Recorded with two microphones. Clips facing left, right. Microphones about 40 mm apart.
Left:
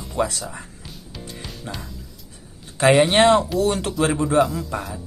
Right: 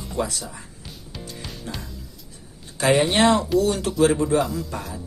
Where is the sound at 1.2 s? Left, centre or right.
Centre.